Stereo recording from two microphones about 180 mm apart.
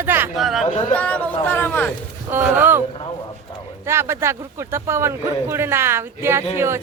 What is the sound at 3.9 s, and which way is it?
Speech, 15° right (ahead or behind).